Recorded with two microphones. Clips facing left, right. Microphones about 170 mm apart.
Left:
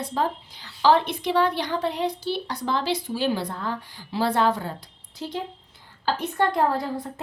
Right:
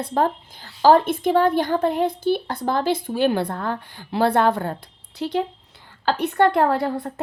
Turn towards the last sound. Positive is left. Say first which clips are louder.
# right 4 dB
turn(degrees=-60)  # may be behind; listen again after turning